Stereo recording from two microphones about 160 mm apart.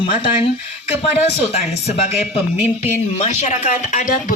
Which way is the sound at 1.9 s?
40° left (ahead or behind).